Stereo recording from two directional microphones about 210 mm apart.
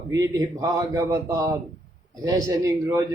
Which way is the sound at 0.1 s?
15° right (ahead or behind).